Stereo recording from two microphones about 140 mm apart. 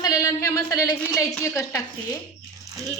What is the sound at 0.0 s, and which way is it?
A woman's voice, 25° left (ahead or behind).